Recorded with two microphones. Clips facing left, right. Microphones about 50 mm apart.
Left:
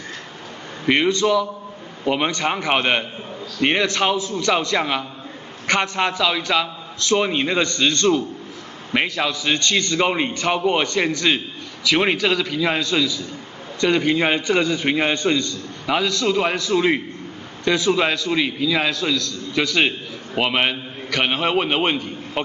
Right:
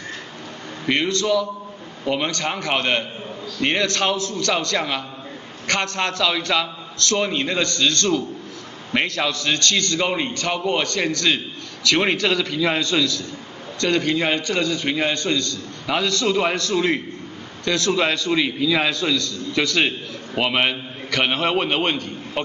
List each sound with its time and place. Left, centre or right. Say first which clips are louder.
0.8 s a man's voice: left 3 dB; centre
7.1 s a man's voice: left 3 dB; centre
8.9 s a man's voice: left 1 dB; centre
15.9 s a man's voice: left 1 dB; centre